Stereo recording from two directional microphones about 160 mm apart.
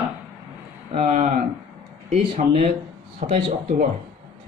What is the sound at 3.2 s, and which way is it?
Speech, 55° right (ahead or behind).